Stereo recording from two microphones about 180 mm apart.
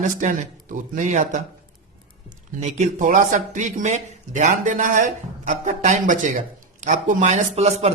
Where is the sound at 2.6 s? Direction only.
40° right (ahead or behind).